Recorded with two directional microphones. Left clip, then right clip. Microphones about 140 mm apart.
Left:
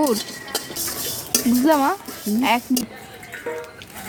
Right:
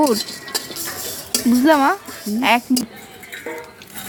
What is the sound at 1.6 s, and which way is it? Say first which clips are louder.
Speech: right 4 dB; 55° right (ahead or behind).